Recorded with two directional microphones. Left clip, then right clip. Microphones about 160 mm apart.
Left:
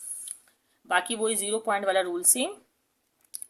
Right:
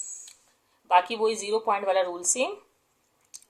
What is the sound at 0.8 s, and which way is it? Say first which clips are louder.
A woman's voice: right 4 dB; 70° left (ahead or behind).